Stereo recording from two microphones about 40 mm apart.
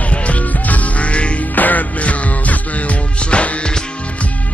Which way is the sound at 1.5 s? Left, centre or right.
Left.